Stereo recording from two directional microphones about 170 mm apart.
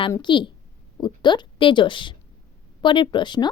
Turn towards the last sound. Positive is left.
turn(degrees=25)  # may be behind; listen again after turning